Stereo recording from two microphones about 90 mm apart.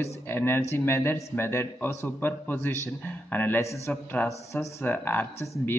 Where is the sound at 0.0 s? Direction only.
25° left (ahead or behind).